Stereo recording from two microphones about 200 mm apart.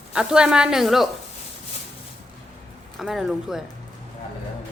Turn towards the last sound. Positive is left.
turn(degrees=0)  # may be behind; listen again after turning